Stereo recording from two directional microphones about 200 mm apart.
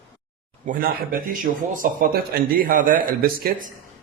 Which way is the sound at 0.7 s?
45° right (ahead or behind).